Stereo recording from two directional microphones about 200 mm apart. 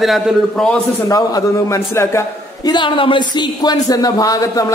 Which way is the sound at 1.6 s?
15° left (ahead or behind).